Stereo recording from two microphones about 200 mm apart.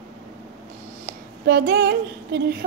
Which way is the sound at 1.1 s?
55° right (ahead or behind).